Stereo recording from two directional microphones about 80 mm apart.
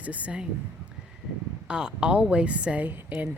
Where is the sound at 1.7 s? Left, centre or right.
Centre.